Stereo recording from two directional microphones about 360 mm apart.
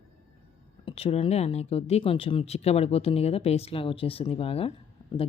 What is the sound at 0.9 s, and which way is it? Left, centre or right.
Speech, centre.